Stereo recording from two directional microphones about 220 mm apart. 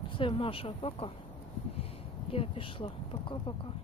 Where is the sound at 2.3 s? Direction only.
25° left (ahead or behind).